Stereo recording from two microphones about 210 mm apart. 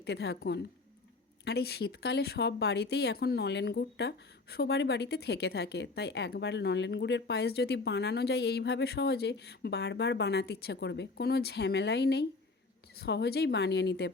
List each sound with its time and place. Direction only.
0.0 s speech: 50° left (ahead or behind)